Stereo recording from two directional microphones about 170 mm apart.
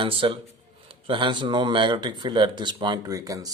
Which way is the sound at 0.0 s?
30° right (ahead or behind).